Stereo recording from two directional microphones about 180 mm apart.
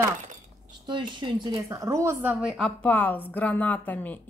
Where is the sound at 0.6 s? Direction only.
25° right (ahead or behind).